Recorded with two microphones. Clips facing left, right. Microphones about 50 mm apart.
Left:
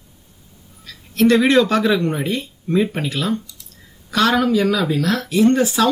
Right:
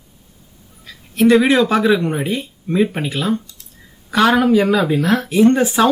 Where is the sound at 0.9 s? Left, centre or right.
Centre.